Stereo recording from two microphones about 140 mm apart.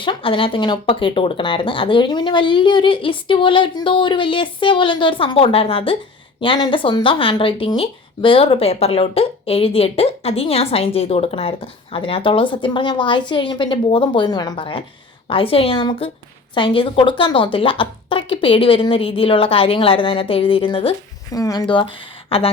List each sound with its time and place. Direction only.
0.0 s speech: 40° left (ahead or behind)
21.3 s speech: 25° left (ahead or behind); by 22.4 s 40° left (ahead or behind)